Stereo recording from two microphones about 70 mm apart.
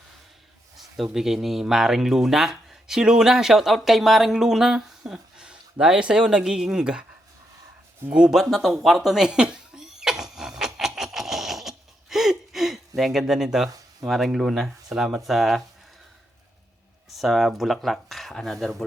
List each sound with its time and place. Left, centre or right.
0.8 s speech: centre
8.1 s a sound: centre
13.0 s speech: centre
13.7 s a sound: right
14.1 s speech: centre
17.2 s speech: centre